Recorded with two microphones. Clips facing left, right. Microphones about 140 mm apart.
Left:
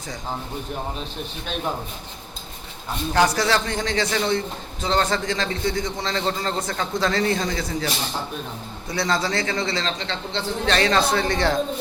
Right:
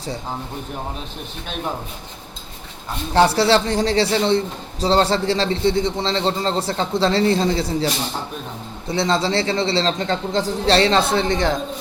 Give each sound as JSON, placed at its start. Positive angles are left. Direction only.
{"t": 3.1, "sound": "a man's voice", "side_deg": -30}
{"t": 8.9, "sound": "a man's voice", "side_deg": -25}
{"t": 10.0, "sound": "a man's voice", "side_deg": -45}